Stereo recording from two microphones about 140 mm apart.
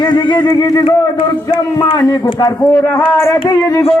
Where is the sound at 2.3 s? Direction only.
30° left (ahead or behind).